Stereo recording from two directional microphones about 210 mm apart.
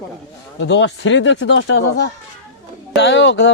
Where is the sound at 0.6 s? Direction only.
60° left (ahead or behind).